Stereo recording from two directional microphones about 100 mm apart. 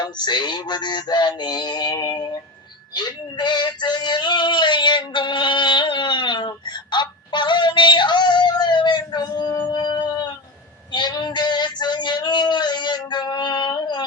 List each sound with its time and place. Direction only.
0.0 s music: 50° left (ahead or behind)
2.9 s male singing: 50° left (ahead or behind)
10.9 s a sound: 45° left (ahead or behind)